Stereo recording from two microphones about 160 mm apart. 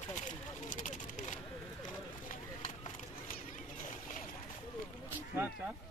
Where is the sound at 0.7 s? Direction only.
55° left (ahead or behind).